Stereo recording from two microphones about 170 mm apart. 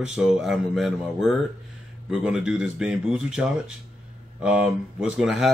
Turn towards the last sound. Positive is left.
turn(degrees=-5)  # may be behind; listen again after turning